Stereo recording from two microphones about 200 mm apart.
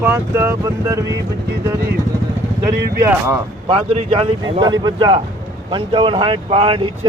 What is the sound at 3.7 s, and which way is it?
Speech, 25° right (ahead or behind).